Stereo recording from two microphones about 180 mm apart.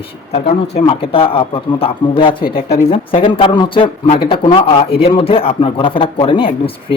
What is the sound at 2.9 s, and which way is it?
Speech, 30° left (ahead or behind).